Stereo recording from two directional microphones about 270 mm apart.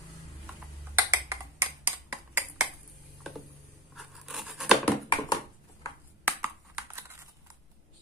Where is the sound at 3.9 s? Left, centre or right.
Centre.